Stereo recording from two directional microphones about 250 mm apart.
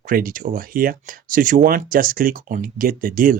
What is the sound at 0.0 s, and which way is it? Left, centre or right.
Speech, right.